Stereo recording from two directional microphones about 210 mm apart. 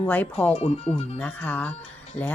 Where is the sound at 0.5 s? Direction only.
30° left (ahead or behind).